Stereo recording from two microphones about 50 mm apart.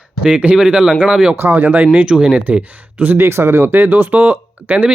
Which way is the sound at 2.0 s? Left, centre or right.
Centre.